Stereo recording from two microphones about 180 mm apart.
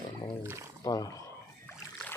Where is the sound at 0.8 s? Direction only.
20° left (ahead or behind).